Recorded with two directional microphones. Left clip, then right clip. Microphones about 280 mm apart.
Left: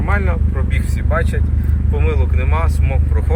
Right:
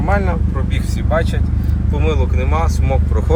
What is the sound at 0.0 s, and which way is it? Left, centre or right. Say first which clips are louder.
Speech: right 3 dB; centre.